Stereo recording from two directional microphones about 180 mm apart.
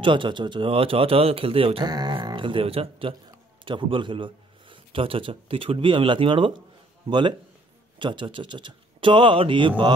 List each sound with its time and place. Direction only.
0.0 s a man's voice: 25° right (ahead or behind)